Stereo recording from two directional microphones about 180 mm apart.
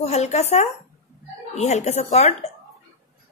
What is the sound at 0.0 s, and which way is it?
Speech, 40° left (ahead or behind).